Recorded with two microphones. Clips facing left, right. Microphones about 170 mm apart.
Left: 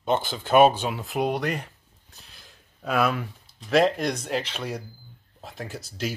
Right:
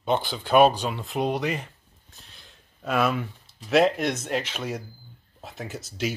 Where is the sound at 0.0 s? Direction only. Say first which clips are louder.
Even; centre (ahead or behind).